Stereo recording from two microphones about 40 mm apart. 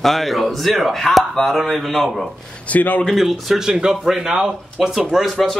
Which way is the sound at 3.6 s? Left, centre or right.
Centre.